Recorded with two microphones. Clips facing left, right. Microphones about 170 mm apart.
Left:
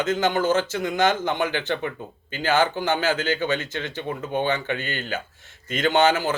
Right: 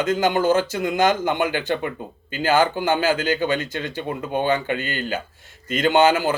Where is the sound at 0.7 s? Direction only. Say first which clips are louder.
Right 2 dB; 50° right (ahead or behind).